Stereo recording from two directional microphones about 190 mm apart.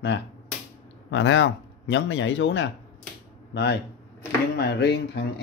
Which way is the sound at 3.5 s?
65° left (ahead or behind).